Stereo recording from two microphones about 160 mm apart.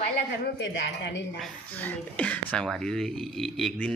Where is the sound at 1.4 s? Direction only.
10° left (ahead or behind).